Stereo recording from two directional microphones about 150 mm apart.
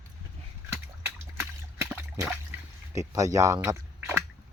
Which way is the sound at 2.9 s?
20° right (ahead or behind).